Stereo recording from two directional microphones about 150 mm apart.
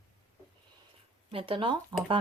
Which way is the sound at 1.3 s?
35° right (ahead or behind).